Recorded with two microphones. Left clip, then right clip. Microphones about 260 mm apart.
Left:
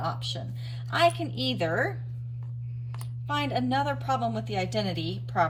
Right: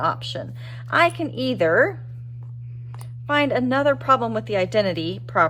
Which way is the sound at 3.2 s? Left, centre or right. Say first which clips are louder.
Right 9 dB; centre.